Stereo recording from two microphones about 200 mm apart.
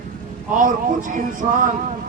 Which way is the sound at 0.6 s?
40° right (ahead or behind).